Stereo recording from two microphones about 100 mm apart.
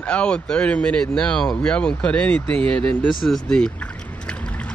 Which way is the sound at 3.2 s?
5° left (ahead or behind).